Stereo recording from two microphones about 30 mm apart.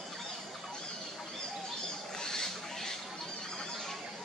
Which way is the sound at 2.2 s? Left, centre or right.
Centre.